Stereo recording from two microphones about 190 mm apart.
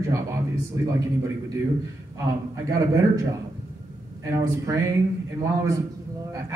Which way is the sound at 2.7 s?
15° right (ahead or behind).